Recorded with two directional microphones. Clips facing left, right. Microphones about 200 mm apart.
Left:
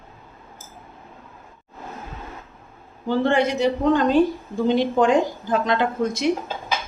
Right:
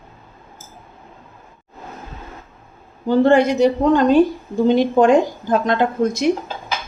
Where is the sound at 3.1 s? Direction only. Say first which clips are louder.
Right 6 dB; 40° right (ahead or behind).